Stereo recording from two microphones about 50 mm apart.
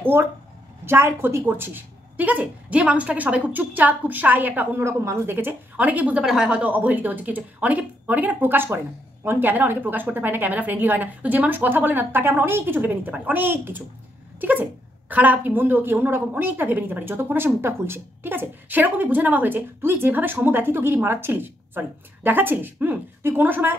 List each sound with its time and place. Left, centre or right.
0.0 s a sound: right
0.8 s speech: right
4.7 s a woman's voice: right
6.2 s speech: centre
6.6 s a woman's voice: right